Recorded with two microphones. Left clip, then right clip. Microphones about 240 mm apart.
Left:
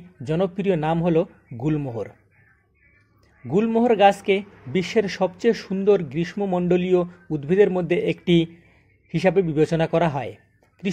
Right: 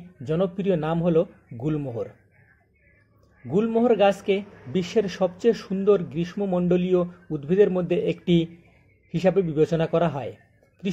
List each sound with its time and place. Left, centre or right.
0.2 s a man's voice: left
3.4 s a man's voice: left